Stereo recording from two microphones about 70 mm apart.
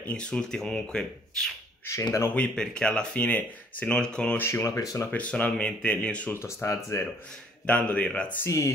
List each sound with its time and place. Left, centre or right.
0.0 s speech: centre
4.4 s speech: left
4.6 s speech: left
5.1 s speech: centre
6.4 s speech: left
7.6 s speech: centre
8.5 s speech: left